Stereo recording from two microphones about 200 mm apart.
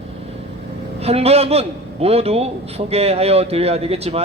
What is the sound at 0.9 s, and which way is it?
A man's voice, 30° right (ahead or behind).